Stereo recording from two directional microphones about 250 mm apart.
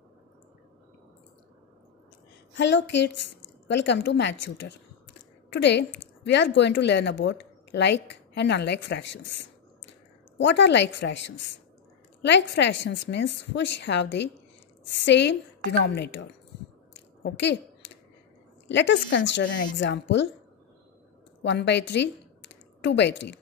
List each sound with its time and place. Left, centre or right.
2.5 s a woman's voice: left
18.7 s a woman's voice: left
21.4 s a woman's voice: left